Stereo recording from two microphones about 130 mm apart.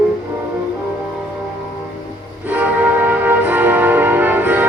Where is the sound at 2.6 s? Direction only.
15° right (ahead or behind).